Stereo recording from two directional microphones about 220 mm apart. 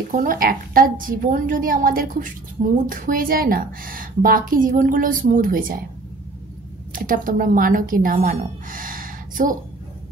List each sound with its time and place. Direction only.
0.1 s a woman's voice: 40° right (ahead or behind)
6.9 s a woman's voice: 40° right (ahead or behind)